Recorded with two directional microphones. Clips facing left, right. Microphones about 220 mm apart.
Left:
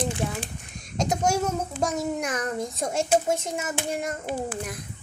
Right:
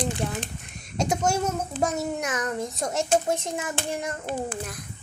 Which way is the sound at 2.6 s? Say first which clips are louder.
Left 1 dB; centre (ahead or behind).